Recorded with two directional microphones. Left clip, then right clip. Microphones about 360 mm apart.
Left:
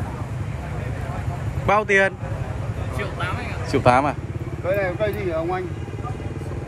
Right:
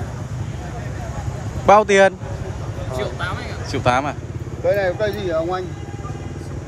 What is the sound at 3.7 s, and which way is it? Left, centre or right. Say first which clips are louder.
Speech: left 2 dB; centre.